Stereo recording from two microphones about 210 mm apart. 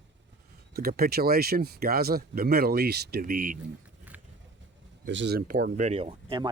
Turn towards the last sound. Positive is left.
turn(degrees=-25)  # may be behind; listen again after turning